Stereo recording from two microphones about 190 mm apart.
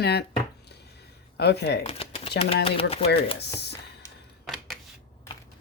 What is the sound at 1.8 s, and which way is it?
Speech, 30° left (ahead or behind).